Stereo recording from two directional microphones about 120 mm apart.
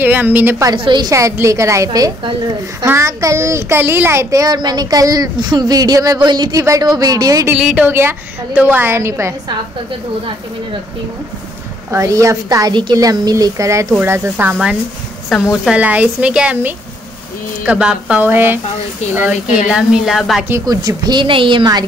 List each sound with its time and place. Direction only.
0.0 s speech: 15° right (ahead or behind)
0.7 s a woman's voice: 40° right (ahead or behind)
1.1 s a child's voice: 25° right (ahead or behind)
7.5 s speech: 10° right (ahead or behind)
7.9 s a child's voice: 20° right (ahead or behind)
11.9 s a child's voice: 25° right (ahead or behind); by 14.8 s 10° right (ahead or behind)
15.3 s a woman's voice: centre (ahead or behind)
15.6 s a woman's voice: 10° right (ahead or behind)
20.6 s a woman's voice: 30° right (ahead or behind)